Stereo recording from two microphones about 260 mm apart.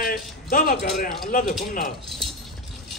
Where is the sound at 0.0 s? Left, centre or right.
Left.